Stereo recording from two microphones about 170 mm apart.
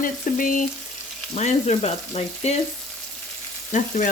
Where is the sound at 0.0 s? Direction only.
55° left (ahead or behind).